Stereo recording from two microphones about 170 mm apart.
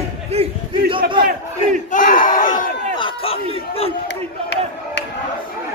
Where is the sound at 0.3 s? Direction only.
35° right (ahead or behind).